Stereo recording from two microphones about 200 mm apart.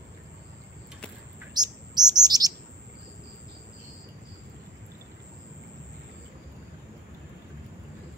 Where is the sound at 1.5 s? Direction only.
20° right (ahead or behind).